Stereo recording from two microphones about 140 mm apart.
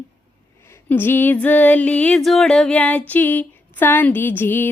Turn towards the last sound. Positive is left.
turn(degrees=15)  # may be behind; listen again after turning